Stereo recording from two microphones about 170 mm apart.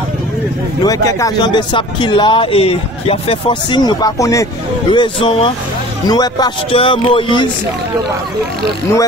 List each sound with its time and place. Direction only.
0.8 s speech: 20° left (ahead or behind)